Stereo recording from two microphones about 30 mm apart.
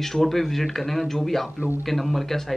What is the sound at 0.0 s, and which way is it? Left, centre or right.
Speech, centre.